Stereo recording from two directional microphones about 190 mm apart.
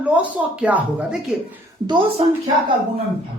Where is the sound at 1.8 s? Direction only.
25° right (ahead or behind).